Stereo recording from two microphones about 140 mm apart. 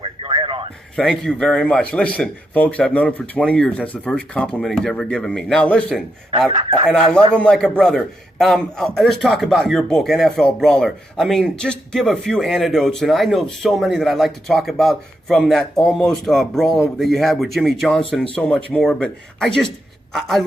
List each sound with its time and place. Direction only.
0.0 s radio: 35° right (ahead or behind)
0.9 s a man's voice: 5° left (ahead or behind)
7.3 s a man's voice: 5° left (ahead or behind)